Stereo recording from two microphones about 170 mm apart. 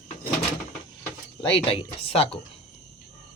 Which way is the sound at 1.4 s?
30° left (ahead or behind).